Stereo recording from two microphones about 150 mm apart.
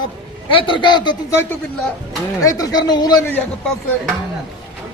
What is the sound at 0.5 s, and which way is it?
Speech, 30° left (ahead or behind).